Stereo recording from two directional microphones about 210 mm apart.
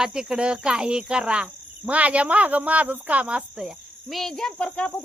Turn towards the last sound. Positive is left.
turn(degrees=5)  # may be behind; listen again after turning